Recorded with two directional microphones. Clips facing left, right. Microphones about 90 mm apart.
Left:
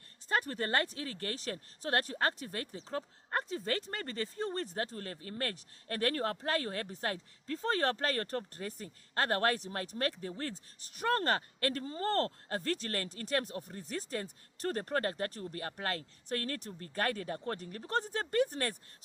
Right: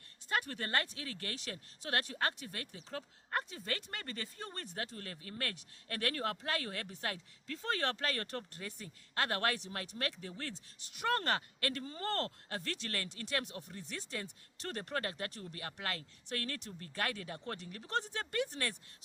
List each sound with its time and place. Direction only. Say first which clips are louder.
0.3 s speech: left 4 dB; 35° left (ahead or behind)